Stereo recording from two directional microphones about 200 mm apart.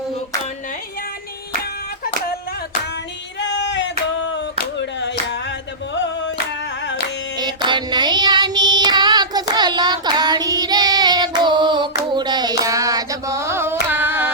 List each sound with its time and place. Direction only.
3.4 s a sound: 65° left (ahead or behind)
6.8 s carnatic music: 55° left (ahead or behind)
7.3 s child singing: 20° right (ahead or behind)
13.9 s carnatic music: 10° right (ahead or behind)